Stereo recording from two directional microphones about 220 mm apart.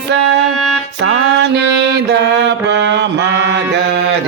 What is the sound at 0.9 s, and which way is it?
Music, 50° right (ahead or behind).